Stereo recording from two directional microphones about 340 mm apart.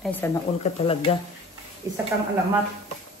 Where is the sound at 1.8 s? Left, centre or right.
Centre.